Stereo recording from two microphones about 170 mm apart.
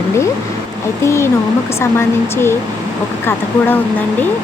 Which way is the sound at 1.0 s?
15° left (ahead or behind).